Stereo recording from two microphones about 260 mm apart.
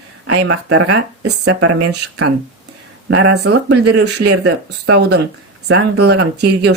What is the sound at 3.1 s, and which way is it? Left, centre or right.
Speech, right.